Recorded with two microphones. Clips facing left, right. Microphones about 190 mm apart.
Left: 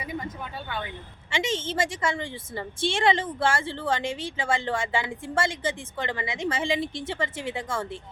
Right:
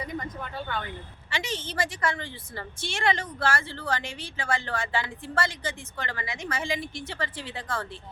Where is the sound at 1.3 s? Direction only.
25° left (ahead or behind).